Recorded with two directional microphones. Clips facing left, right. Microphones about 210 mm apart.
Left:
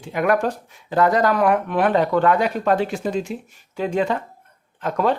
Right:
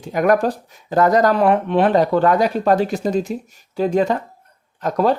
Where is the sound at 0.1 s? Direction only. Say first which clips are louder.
Right 3 dB; 40° right (ahead or behind).